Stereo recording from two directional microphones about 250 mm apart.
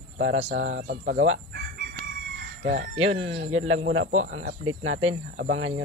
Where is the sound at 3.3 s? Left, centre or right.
Right.